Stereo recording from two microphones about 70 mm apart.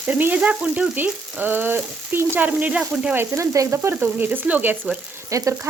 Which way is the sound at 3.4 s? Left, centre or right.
Right.